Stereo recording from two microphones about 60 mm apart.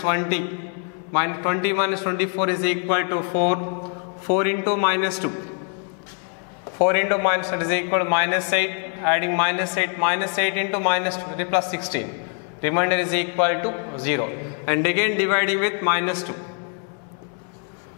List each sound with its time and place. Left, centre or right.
0.0 s a man's voice: centre
6.8 s a man's voice: centre